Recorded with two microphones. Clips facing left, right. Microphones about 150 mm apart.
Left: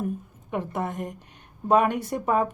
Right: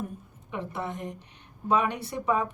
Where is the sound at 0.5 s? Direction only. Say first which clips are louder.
Left 5 dB; 50° left (ahead or behind).